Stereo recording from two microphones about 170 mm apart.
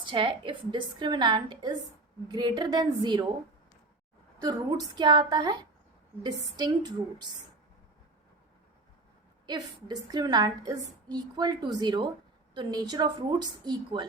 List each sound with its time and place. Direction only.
0.0 s a woman's voice: 30° right (ahead or behind)
4.4 s a woman's voice: 20° right (ahead or behind)
9.5 s a woman's voice: 25° right (ahead or behind)